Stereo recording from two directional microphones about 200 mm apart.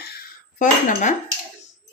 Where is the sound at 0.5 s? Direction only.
40° left (ahead or behind).